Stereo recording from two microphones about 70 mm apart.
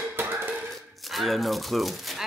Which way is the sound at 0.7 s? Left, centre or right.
Centre.